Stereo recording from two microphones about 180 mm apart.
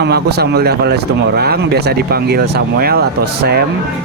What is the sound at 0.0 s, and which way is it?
Speech, 65° right (ahead or behind).